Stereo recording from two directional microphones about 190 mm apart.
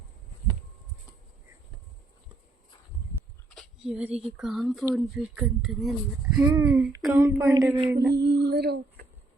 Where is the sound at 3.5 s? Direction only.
Centre (ahead or behind); by 7.8 s 15° right (ahead or behind).